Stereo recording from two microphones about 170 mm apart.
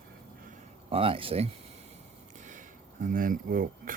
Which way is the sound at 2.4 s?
50° right (ahead or behind).